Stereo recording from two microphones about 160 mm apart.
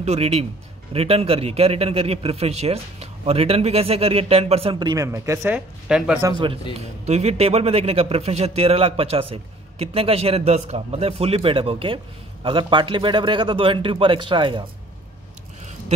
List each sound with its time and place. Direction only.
0.0 s a man's voice: 40° right (ahead or behind); by 5.6 s 15° right (ahead or behind)
5.9 s speech: 5° right (ahead or behind)
6.8 s a man's voice: 40° right (ahead or behind)